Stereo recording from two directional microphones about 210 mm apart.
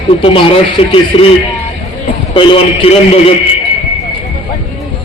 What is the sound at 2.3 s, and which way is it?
A man's voice, 25° left (ahead or behind).